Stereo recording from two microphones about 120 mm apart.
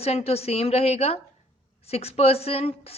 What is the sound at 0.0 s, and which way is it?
A woman's voice, 55° left (ahead or behind).